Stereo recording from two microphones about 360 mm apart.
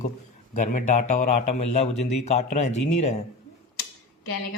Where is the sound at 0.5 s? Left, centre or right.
Left.